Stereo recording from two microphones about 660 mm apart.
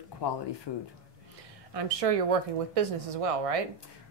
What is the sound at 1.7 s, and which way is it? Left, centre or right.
Speech, right.